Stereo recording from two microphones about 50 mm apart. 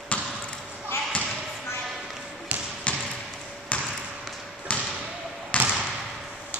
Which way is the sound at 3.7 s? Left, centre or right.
Left.